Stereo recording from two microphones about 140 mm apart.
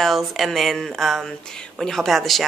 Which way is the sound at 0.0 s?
Centre (ahead or behind).